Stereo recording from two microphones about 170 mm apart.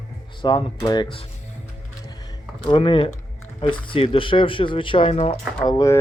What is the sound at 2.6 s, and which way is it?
Speech, 30° left (ahead or behind).